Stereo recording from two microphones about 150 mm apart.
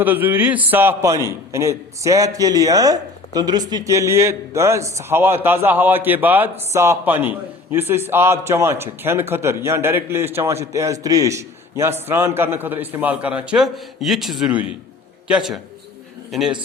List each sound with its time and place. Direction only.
0.0 s a man's voice: 10° right (ahead or behind)